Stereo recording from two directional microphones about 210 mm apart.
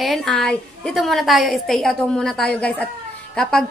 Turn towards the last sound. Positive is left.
turn(degrees=5)  # may be behind; listen again after turning